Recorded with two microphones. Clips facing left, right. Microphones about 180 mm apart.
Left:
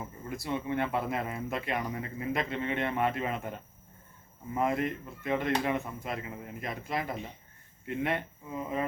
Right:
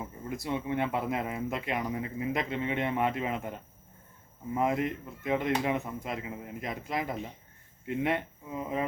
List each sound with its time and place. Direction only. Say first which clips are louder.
0.3 s a man's voice: right 1 dB; 15° right (ahead or behind)